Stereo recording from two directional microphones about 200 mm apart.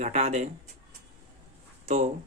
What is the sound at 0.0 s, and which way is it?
Speech, 35° right (ahead or behind).